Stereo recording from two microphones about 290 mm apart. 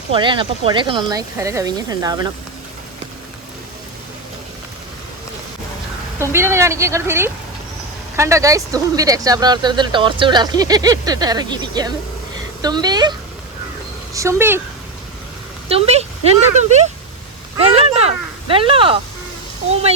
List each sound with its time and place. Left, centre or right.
0.1 s speech: centre
6.1 s speech: centre
15.7 s speech: right